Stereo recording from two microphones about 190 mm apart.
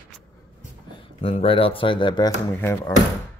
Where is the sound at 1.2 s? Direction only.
30° left (ahead or behind).